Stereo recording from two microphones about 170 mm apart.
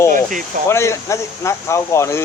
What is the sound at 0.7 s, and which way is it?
Speech, 15° left (ahead or behind).